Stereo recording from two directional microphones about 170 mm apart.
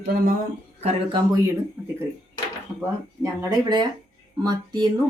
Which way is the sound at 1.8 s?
15° right (ahead or behind).